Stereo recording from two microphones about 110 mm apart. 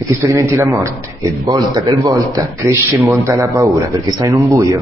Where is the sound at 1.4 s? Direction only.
40° right (ahead or behind).